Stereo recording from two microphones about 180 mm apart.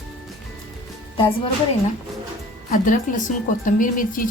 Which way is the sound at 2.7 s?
45° left (ahead or behind).